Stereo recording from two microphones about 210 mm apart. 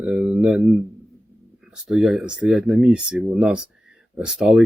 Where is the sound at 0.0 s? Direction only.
5° right (ahead or behind).